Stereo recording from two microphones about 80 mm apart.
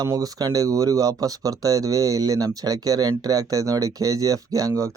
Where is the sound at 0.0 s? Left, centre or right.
Right.